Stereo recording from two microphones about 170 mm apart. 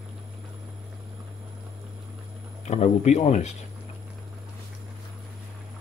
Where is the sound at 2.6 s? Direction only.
40° left (ahead or behind).